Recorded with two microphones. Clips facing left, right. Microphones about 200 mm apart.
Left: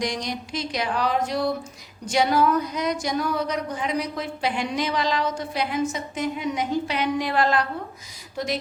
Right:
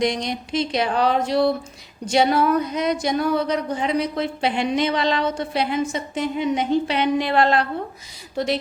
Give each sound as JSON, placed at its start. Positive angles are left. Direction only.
{"t": 0.0, "sound": "a woman's voice", "side_deg": -25}